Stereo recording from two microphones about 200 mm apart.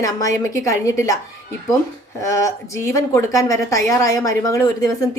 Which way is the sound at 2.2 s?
15° left (ahead or behind).